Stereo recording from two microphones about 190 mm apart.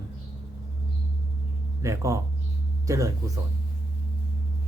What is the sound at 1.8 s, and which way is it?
Speech, 15° right (ahead or behind).